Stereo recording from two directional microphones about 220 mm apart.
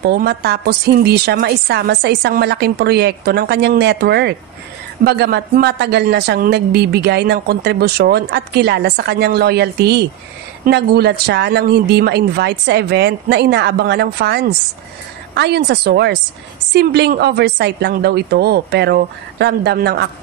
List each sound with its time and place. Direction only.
0.0 s speech: 45° right (ahead or behind)